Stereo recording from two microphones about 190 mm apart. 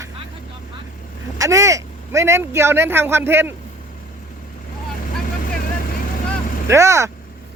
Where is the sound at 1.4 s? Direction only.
15° right (ahead or behind).